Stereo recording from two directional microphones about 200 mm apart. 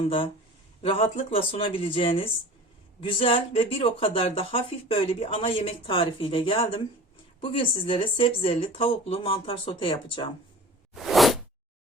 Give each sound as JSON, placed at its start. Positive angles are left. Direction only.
{"t": 0.8, "sound": "speech", "side_deg": 25}
{"t": 10.9, "sound": "whoosh", "side_deg": 0}